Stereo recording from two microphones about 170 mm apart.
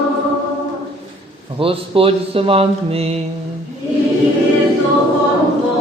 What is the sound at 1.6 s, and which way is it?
A man's voice, 35° right (ahead or behind).